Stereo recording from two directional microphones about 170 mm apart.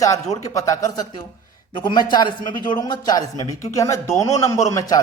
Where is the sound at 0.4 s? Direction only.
20° left (ahead or behind).